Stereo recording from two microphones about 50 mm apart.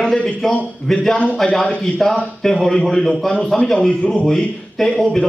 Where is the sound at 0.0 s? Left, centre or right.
Centre.